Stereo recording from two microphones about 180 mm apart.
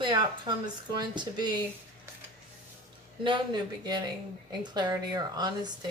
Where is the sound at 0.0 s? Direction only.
25° right (ahead or behind).